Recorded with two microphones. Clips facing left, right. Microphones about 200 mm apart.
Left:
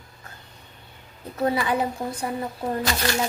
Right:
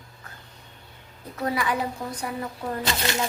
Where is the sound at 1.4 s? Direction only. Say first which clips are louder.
Left 3 dB; 25° left (ahead or behind).